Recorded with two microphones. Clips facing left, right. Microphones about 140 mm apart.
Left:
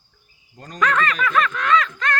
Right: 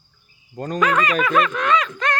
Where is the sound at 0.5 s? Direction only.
55° right (ahead or behind).